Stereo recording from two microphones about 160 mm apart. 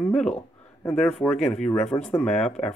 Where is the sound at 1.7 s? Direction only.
40° left (ahead or behind).